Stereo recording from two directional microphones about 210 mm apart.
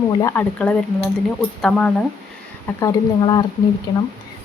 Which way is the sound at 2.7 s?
20° left (ahead or behind).